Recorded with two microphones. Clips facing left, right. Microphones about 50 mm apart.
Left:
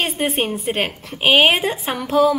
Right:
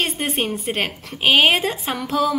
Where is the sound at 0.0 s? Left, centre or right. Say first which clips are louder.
Left 2 dB; centre.